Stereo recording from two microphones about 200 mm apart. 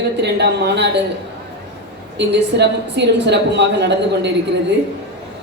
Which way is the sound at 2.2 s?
60° right (ahead or behind).